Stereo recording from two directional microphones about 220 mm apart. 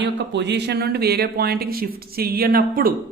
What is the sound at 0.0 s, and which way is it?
Speech, 55° right (ahead or behind).